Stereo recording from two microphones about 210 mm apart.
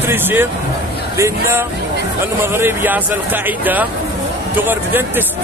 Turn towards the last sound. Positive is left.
turn(degrees=-10)  # may be behind; listen again after turning